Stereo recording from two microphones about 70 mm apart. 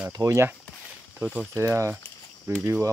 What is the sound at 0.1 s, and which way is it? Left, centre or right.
Speech, right.